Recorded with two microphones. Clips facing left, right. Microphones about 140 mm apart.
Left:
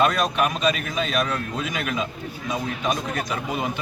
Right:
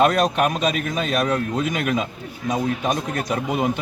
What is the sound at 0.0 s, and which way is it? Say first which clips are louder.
A man's voice: right 3 dB; 55° right (ahead or behind).